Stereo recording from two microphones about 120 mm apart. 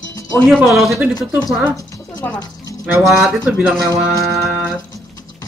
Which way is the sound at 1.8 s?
30° left (ahead or behind).